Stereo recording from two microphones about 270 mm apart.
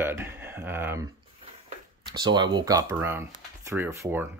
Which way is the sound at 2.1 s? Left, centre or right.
Centre.